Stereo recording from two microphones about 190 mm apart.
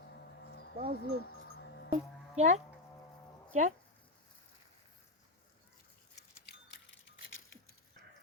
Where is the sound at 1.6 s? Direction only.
65° left (ahead or behind).